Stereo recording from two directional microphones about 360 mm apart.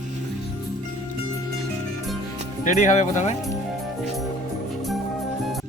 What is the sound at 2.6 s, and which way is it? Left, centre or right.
Speech, centre.